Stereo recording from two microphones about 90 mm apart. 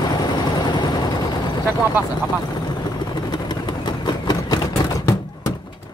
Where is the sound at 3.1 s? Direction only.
55° left (ahead or behind); by 5.2 s 40° left (ahead or behind).